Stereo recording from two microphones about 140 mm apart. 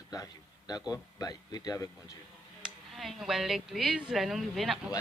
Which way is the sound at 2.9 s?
Centre (ahead or behind).